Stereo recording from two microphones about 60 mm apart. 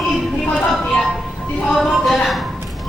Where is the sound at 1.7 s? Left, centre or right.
Centre.